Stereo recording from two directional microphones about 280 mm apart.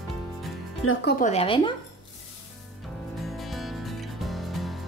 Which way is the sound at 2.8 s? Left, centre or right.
Centre.